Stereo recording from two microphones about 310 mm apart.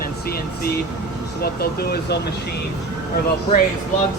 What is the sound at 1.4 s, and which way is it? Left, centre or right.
Speech, left.